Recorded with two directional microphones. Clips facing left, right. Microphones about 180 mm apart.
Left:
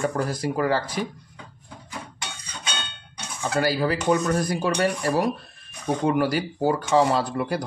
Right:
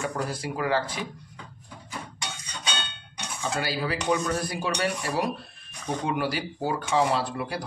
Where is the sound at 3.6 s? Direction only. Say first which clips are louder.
Left 8 dB; 45° left (ahead or behind).